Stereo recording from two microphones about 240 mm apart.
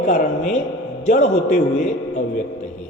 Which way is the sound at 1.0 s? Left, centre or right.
Left.